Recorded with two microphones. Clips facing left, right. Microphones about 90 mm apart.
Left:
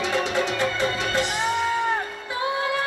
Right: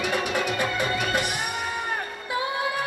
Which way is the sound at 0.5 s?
15° right (ahead or behind).